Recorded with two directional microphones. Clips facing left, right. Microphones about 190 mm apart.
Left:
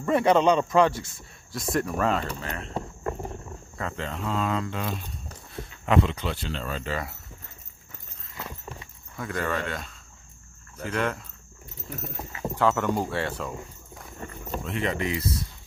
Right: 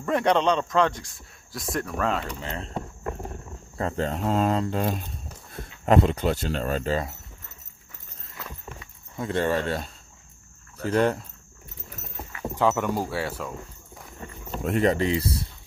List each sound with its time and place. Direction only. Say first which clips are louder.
0.0 s speech: left 2 dB; 5° left (ahead or behind)
2.4 s speech: right 1 dB; 25° right (ahead or behind)
3.7 s speech: right 6 dB; 35° right (ahead or behind)
9.1 s speech: right 5 dB; 25° right (ahead or behind)
12.5 s speech: even; 15° right (ahead or behind)
14.6 s speech: right 7 dB; 45° right (ahead or behind)